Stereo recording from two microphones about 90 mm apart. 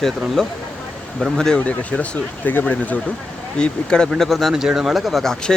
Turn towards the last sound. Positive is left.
turn(degrees=5)  # may be behind; listen again after turning